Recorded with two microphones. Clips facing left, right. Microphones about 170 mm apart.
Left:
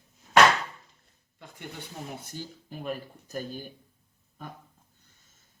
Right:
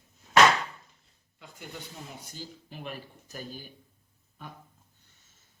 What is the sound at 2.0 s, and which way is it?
Speech, 55° left (ahead or behind).